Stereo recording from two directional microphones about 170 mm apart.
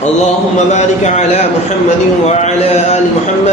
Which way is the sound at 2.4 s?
40° left (ahead or behind).